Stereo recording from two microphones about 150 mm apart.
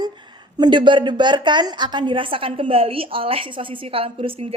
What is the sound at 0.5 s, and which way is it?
A woman's voice, 30° right (ahead or behind).